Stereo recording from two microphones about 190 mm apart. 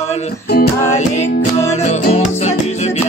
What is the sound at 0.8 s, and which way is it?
Music, 35° left (ahead or behind).